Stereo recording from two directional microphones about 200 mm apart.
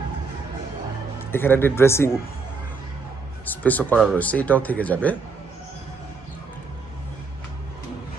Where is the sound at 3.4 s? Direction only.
10° left (ahead or behind).